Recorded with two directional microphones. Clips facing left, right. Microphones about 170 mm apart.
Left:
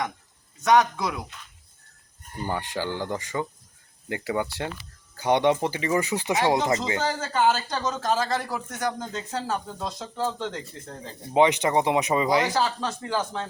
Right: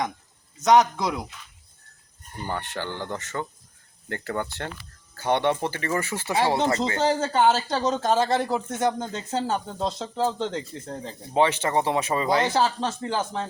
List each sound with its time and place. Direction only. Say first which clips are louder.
0.6 s speech: right 2 dB; 20° right (ahead or behind)
2.4 s speech: left 2 dB; 10° left (ahead or behind)
7.0 s speech: right 6 dB; 30° right (ahead or behind)
11.3 s speech: left 2 dB; 15° left (ahead or behind)
12.5 s speech: right 2 dB; 25° right (ahead or behind)